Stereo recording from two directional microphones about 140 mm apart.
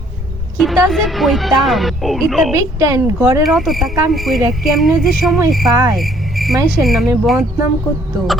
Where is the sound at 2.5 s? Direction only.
20° right (ahead or behind).